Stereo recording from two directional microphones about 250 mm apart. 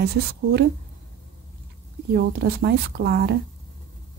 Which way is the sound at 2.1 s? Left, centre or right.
Right.